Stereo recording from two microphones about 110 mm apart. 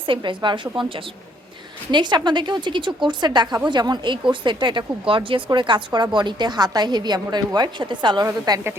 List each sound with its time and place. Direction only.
0.0 s a woman's voice: 50° right (ahead or behind)
8.2 s a woman's voice: 30° right (ahead or behind)